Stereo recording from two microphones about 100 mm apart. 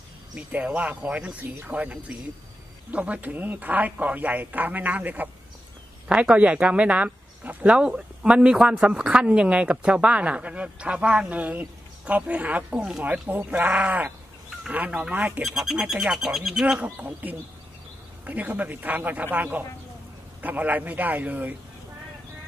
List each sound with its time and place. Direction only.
0.4 s speech: 15° right (ahead or behind)
15.4 s speech: 5° right (ahead or behind)